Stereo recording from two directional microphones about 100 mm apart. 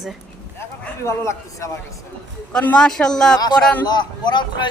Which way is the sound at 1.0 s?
30° left (ahead or behind).